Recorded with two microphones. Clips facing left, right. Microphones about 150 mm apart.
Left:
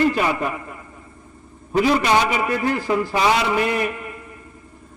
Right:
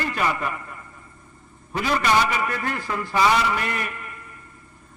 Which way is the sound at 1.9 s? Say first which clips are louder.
Left 3 dB; 10° left (ahead or behind).